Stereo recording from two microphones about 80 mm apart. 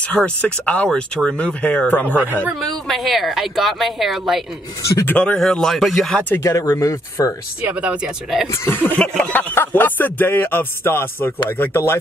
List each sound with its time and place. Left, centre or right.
0.1 s speech: centre
2.6 s speech: centre
5.0 s speech: centre
6.1 s speech: left
6.4 s speech: left
7.6 s speech: centre
8.5 s speech: left